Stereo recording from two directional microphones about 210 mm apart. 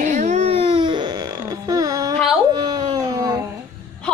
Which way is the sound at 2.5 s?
20° right (ahead or behind).